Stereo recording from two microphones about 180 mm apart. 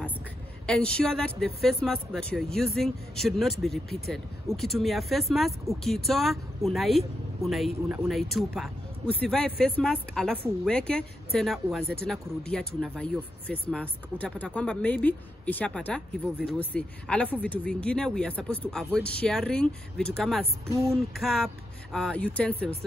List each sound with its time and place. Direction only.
0.7 s speech: 5° left (ahead or behind)